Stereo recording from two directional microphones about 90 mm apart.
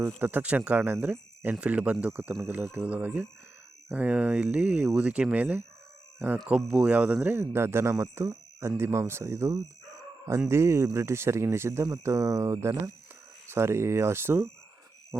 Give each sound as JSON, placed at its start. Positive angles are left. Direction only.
{"t": 0.2, "sound": "speech", "side_deg": -20}
{"t": 2.8, "sound": "speech", "side_deg": -15}